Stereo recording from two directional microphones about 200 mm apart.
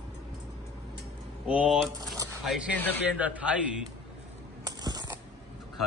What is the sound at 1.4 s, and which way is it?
Speech, 5° right (ahead or behind).